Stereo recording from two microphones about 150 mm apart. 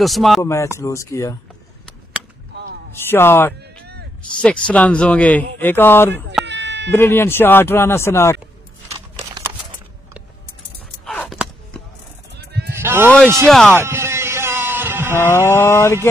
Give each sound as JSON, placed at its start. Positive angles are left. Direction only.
{"t": 0.0, "sound": "speech", "side_deg": 0}
{"t": 0.4, "sound": "speech", "side_deg": 20}
{"t": 2.9, "sound": "a man's voice", "side_deg": 15}
{"t": 12.7, "sound": "sheep", "side_deg": -15}
{"t": 13.1, "sound": "a sound", "side_deg": 5}
{"t": 13.5, "sound": "speech", "side_deg": 5}
{"t": 13.7, "sound": "music", "side_deg": -15}
{"t": 15.4, "sound": "a man's voice", "side_deg": 15}